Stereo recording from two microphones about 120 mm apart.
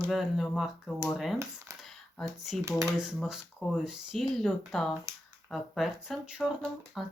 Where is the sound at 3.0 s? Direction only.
5° right (ahead or behind).